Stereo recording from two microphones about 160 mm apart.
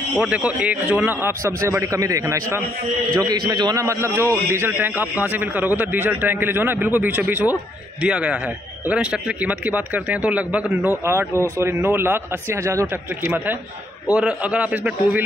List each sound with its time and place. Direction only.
0.3 s a man's voice: 10° right (ahead or behind)